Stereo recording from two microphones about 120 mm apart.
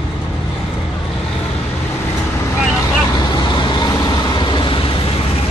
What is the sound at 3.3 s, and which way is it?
Vehicle, 40° left (ahead or behind).